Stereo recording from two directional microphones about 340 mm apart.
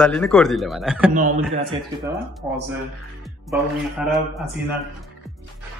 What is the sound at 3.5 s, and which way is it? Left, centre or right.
Speech, centre.